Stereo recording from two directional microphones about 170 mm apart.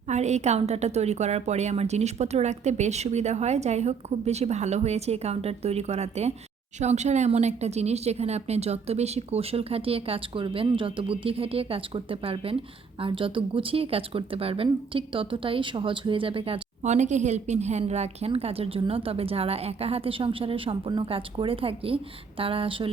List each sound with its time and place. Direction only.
0.1 s speech: 40° right (ahead or behind)